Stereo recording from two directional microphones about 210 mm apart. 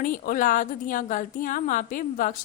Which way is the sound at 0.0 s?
40° left (ahead or behind).